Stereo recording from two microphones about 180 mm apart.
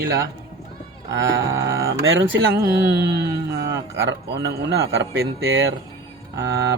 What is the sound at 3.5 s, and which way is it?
A man's voice, 70° right (ahead or behind).